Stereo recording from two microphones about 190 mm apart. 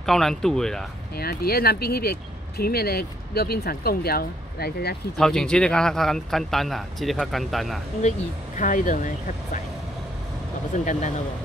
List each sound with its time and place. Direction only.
0.0 s a man's voice: centre (ahead or behind)
1.1 s speech: 55° left (ahead or behind)
5.1 s a man's voice: 5° left (ahead or behind)
8.5 s speech: 45° left (ahead or behind)
10.9 s speech: 40° left (ahead or behind)